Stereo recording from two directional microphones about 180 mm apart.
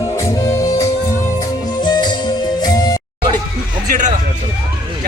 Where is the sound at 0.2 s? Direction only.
20° left (ahead or behind).